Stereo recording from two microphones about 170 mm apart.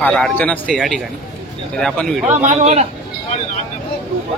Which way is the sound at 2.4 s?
45° right (ahead or behind).